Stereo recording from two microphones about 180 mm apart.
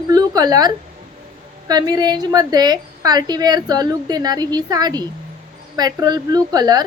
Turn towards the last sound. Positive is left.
turn(degrees=-20)  # may be behind; listen again after turning